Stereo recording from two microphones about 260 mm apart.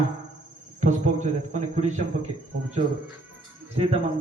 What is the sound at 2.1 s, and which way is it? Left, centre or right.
Speech, right.